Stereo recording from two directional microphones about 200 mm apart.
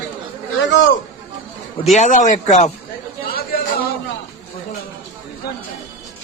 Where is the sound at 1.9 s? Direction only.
40° left (ahead or behind).